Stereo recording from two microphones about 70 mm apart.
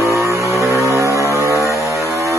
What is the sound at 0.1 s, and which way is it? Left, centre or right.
Vehicle, right.